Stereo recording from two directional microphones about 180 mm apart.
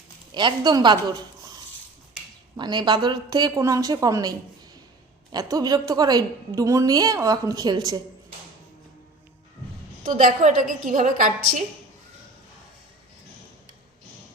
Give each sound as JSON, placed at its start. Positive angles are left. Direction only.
{"t": 0.3, "sound": "a woman's voice", "side_deg": -25}
{"t": 2.6, "sound": "a woman's voice", "side_deg": -25}
{"t": 10.0, "sound": "a woman's voice", "side_deg": -45}